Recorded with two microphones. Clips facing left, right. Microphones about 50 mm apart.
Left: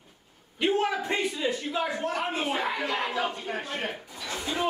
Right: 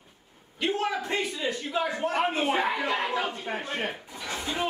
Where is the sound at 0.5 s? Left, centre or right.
Centre.